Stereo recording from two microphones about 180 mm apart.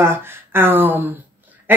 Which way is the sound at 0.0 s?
15° right (ahead or behind).